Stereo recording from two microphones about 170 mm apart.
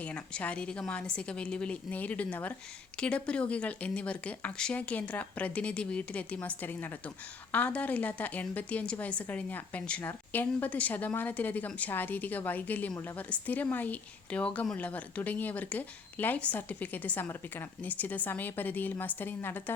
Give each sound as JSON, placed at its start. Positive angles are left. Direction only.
{"t": 0.0, "sound": "a woman's voice", "side_deg": 10}